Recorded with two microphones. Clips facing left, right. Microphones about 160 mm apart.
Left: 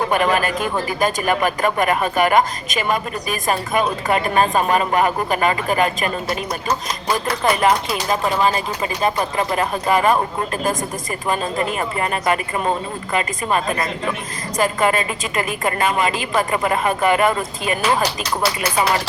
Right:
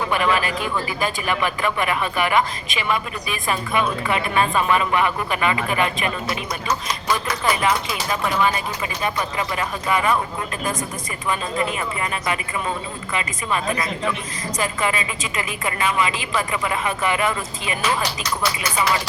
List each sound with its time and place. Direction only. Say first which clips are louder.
0.0 s speech: left 3 dB; 45° left (ahead or behind)
7.4 s speech: left 4 dB; 50° left (ahead or behind)
11.3 s speech: left 2 dB; 45° left (ahead or behind)